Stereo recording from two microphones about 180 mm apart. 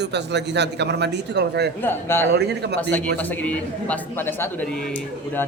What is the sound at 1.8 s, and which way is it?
Speech, 10° left (ahead or behind).